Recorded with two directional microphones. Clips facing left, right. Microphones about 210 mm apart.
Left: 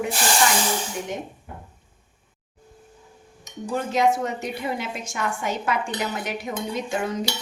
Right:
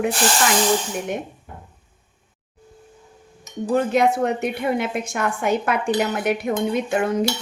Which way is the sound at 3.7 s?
60° right (ahead or behind).